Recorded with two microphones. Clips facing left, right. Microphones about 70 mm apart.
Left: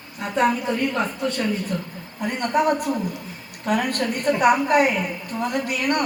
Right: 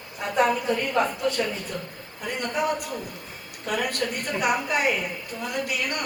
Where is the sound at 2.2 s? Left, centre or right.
Left.